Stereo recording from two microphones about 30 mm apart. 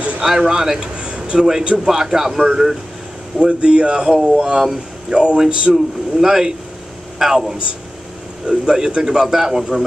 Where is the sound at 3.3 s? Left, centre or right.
Right.